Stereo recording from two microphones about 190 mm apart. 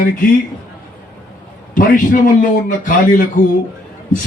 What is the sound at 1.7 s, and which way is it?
A man's voice, 45° left (ahead or behind).